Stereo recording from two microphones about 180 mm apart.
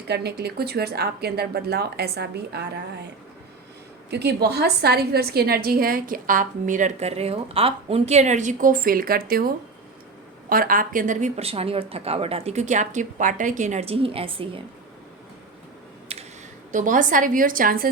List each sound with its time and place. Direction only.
0.1 s speech: 65° right (ahead or behind)
4.1 s a woman's voice: 65° right (ahead or behind)
10.5 s a woman's voice: 50° right (ahead or behind); by 14.6 s 30° right (ahead or behind)
16.1 s a sound: 35° right (ahead or behind)
16.7 s a woman's voice: 45° right (ahead or behind)